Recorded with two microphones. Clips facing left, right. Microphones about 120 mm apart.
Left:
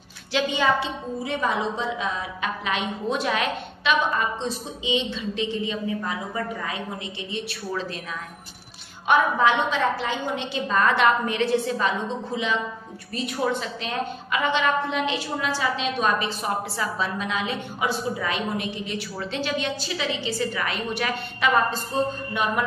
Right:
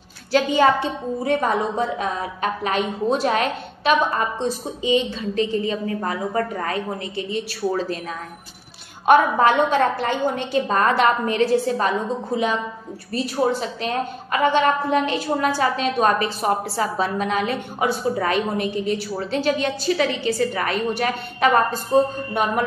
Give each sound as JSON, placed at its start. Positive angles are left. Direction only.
{"t": 0.3, "sound": "a woman's voice", "side_deg": -45}
{"t": 9.0, "sound": "a woman's voice", "side_deg": -50}
{"t": 13.1, "sound": "a woman's voice", "side_deg": -35}
{"t": 22.4, "sound": "mantra", "side_deg": -40}